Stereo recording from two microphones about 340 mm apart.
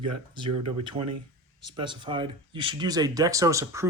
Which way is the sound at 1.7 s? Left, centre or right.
Centre.